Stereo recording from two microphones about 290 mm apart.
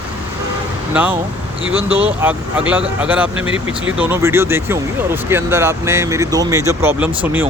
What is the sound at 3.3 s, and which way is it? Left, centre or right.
Speech, right.